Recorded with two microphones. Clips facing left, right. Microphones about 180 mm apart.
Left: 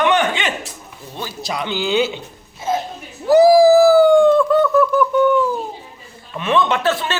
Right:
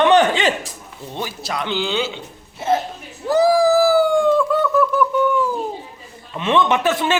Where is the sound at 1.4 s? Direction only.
Centre (ahead or behind).